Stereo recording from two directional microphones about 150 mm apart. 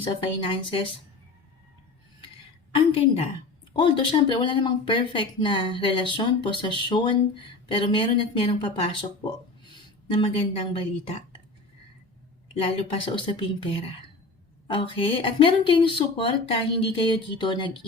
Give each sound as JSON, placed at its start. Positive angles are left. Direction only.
{"t": 0.0, "sound": "speech", "side_deg": 35}
{"t": 2.7, "sound": "speech", "side_deg": 35}
{"t": 10.1, "sound": "speech", "side_deg": 35}
{"t": 12.5, "sound": "speech", "side_deg": 35}